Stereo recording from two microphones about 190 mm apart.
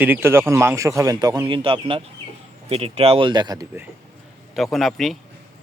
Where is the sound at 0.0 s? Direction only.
10° right (ahead or behind).